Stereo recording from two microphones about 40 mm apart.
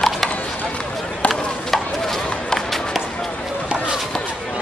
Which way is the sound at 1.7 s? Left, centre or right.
Centre.